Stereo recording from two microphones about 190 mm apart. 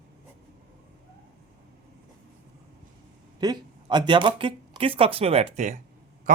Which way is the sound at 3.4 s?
20° right (ahead or behind).